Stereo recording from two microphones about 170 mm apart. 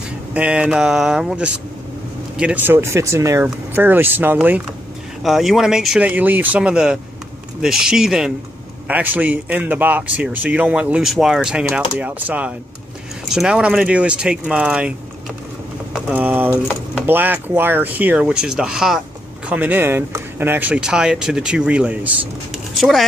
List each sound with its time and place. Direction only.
0.3 s speech: 5° right (ahead or behind)